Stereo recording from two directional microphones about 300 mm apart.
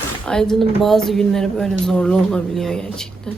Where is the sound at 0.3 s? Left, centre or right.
Centre.